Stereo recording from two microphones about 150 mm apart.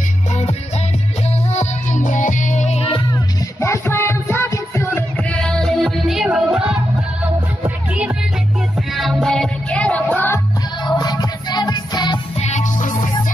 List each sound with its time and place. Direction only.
0.3 s music: 45° left (ahead or behind)
3.6 s music: 15° left (ahead or behind)
10.8 s music: 25° left (ahead or behind)
12.4 s music: 50° left (ahead or behind)